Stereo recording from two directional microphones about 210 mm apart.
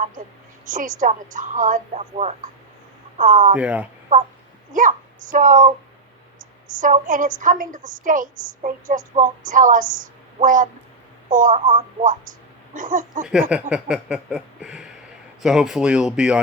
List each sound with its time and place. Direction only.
0.6 s a woman's voice: 40° right (ahead or behind)
3.5 s speech: 5° right (ahead or behind)
4.7 s speech: 40° right (ahead or behind)
6.7 s a woman's voice: 35° right (ahead or behind)
13.2 s a sound: 5° right (ahead or behind)